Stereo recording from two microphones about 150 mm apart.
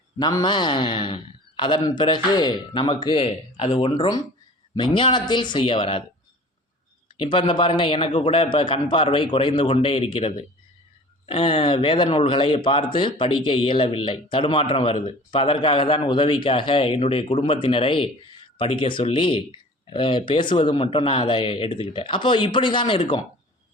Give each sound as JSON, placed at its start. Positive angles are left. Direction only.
{"t": 0.2, "sound": "speech", "side_deg": 25}
{"t": 7.2, "sound": "speech", "side_deg": 35}